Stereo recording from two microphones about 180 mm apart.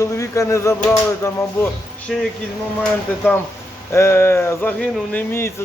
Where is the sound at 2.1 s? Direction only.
Centre (ahead or behind).